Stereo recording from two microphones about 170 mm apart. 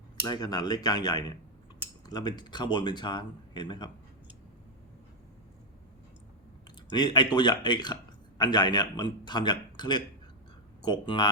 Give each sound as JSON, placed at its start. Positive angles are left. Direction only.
{"t": 0.3, "sound": "speech", "side_deg": 25}
{"t": 6.9, "sound": "speech", "side_deg": 25}